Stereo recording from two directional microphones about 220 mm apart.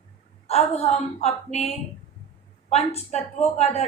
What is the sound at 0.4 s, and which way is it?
A woman's voice, 30° left (ahead or behind).